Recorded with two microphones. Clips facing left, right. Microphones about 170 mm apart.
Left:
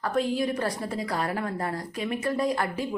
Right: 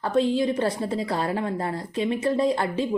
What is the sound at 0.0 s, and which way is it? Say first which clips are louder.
Speech: right 4 dB; 25° right (ahead or behind).